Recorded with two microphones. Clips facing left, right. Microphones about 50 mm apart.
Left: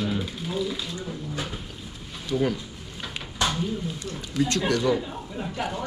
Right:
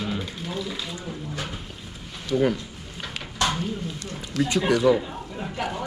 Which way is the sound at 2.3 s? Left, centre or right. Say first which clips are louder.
Right 3 dB; centre.